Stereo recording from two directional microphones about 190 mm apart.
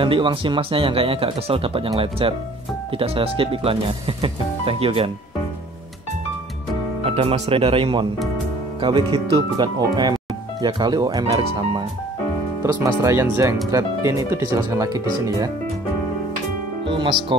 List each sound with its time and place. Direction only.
0.0 s speech: 25° right (ahead or behind)
7.0 s speech: 30° right (ahead or behind)
12.6 s speech: 15° right (ahead or behind)
16.8 s music: 25° right (ahead or behind)